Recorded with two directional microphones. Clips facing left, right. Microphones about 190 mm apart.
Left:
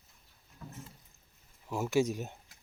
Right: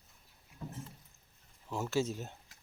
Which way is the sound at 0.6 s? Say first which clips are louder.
Right 4 dB; 25° right (ahead or behind).